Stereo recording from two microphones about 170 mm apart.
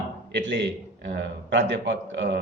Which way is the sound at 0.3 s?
90° right.